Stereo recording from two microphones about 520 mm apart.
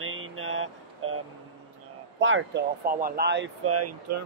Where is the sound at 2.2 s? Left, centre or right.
Right.